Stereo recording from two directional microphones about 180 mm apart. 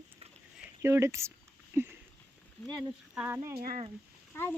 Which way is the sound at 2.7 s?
5° right (ahead or behind).